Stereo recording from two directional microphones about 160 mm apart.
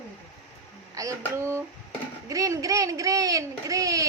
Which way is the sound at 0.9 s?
20° right (ahead or behind).